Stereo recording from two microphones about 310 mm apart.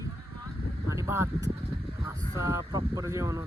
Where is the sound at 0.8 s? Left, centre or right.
Centre.